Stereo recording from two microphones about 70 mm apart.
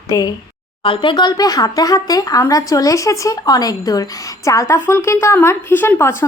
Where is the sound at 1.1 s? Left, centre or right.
Left.